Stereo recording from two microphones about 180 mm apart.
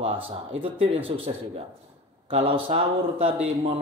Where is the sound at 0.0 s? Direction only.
30° right (ahead or behind).